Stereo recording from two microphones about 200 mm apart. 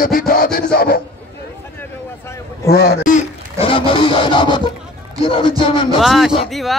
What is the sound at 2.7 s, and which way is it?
Speech, 50° left (ahead or behind).